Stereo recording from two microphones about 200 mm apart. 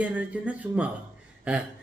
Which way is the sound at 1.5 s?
5° right (ahead or behind).